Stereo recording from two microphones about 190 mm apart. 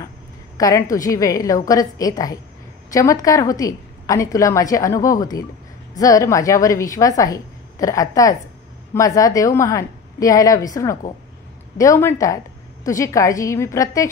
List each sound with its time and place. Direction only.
0.6 s a woman's voice: 20° left (ahead or behind)